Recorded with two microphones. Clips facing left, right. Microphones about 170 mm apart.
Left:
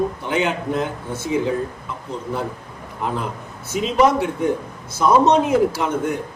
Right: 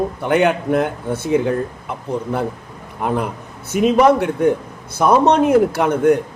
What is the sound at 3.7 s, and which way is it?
A man's voice, 60° right (ahead or behind).